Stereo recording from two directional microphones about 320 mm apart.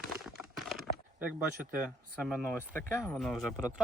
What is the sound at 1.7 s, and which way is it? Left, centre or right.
Speech, centre.